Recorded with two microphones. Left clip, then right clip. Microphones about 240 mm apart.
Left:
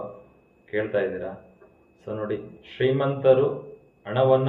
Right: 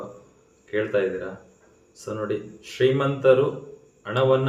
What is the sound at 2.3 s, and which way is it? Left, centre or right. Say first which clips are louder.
Speech: right 2 dB; centre.